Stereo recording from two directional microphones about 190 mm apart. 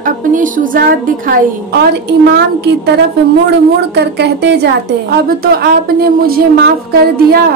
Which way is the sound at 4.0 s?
65° right (ahead or behind).